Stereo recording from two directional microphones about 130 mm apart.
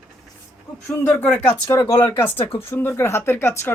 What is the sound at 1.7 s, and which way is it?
Speech, 25° left (ahead or behind).